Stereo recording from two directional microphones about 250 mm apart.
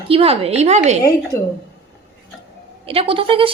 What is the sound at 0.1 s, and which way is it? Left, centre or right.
Speech, right.